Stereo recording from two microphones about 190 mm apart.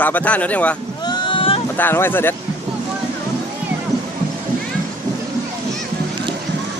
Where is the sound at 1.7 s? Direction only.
10° left (ahead or behind).